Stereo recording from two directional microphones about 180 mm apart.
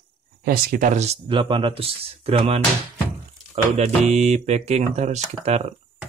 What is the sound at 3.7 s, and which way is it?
Speech, 40° right (ahead or behind).